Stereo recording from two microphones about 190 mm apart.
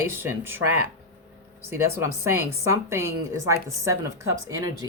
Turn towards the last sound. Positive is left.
turn(degrees=-15)  # may be behind; listen again after turning